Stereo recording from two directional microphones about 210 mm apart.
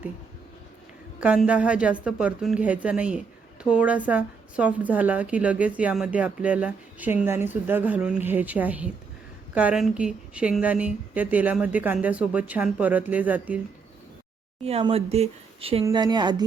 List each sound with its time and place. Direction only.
1.2 s a woman's voice: 5° right (ahead or behind)
14.6 s a woman's voice: 30° right (ahead or behind)